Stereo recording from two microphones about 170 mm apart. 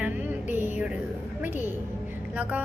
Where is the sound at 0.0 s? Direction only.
10° right (ahead or behind).